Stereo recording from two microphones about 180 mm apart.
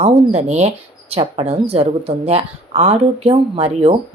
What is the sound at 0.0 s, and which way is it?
Speech, 35° right (ahead or behind).